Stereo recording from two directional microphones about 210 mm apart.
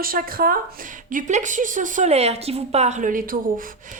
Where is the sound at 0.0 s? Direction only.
45° right (ahead or behind).